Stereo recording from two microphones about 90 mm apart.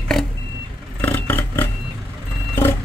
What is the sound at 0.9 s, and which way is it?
Vehicle, 20° left (ahead or behind).